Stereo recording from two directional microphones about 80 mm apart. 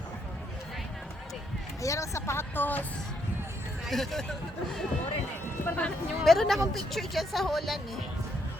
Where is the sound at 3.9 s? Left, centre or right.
Centre.